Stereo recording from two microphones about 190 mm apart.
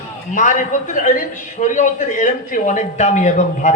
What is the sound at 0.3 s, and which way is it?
A man's voice, 40° left (ahead or behind).